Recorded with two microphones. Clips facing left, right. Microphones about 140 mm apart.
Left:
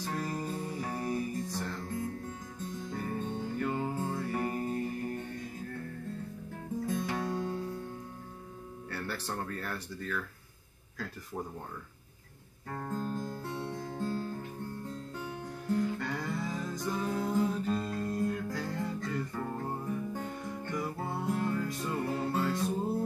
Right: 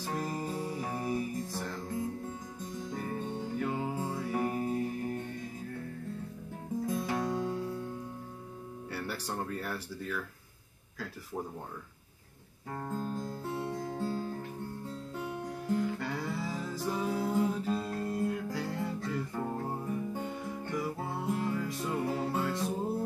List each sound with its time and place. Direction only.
0.0 s music: 5° right (ahead or behind)
2.9 s music: centre (ahead or behind)
7.1 s music: 15° right (ahead or behind)
8.9 s speech: 10° right (ahead or behind)
12.9 s music: 5° right (ahead or behind)
15.7 s music: 5° right (ahead or behind)
19.3 s music: 15° right (ahead or behind)